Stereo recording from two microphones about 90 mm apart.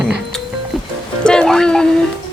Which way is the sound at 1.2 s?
10° left (ahead or behind).